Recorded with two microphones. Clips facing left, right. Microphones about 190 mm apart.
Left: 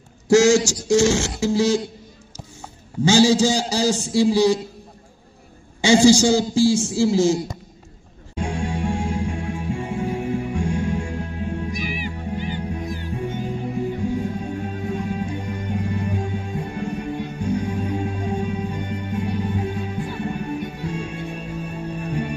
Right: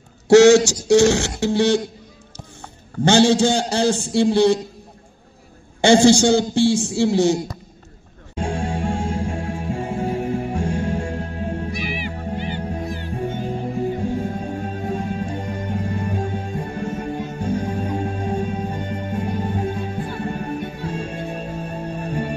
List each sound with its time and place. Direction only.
0.3 s a man's voice: 65° right (ahead or behind)
1.1 s a man's voice: centre (ahead or behind)
3.0 s a man's voice: 60° right (ahead or behind)
3.3 s a man's voice: centre (ahead or behind)
5.8 s a woman's voice: 55° right (ahead or behind)
6.2 s a man's voice: centre (ahead or behind)
8.4 s music: 40° right (ahead or behind)
11.7 s music: 45° left (ahead or behind)
12.5 s music: 45° right (ahead or behind)